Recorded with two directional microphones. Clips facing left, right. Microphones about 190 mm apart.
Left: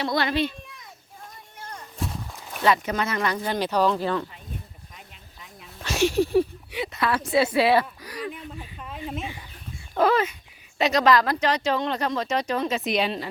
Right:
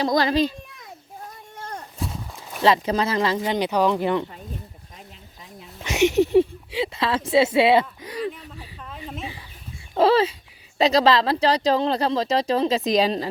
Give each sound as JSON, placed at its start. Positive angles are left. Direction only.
{"t": 0.0, "sound": "speech", "side_deg": -35}
{"t": 2.6, "sound": "speech", "side_deg": -30}
{"t": 5.8, "sound": "a sound", "side_deg": -20}
{"t": 7.3, "sound": "speech", "side_deg": -25}
{"t": 8.8, "sound": "a sound", "side_deg": 5}
{"t": 9.9, "sound": "speech", "side_deg": -30}